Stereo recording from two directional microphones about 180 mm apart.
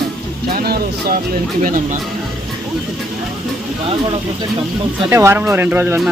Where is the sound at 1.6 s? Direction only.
50° right (ahead or behind).